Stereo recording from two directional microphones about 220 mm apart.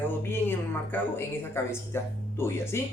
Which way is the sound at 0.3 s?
10° left (ahead or behind).